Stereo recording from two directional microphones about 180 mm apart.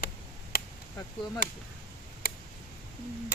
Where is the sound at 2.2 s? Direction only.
60° left (ahead or behind).